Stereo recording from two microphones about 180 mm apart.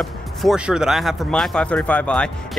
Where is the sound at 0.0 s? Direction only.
Centre (ahead or behind).